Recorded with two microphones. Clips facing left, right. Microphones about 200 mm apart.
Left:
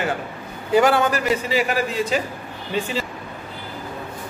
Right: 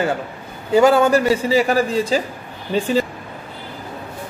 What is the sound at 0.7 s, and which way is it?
A man's voice, 25° right (ahead or behind).